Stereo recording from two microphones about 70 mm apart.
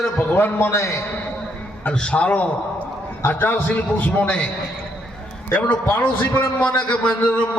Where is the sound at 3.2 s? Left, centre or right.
Left.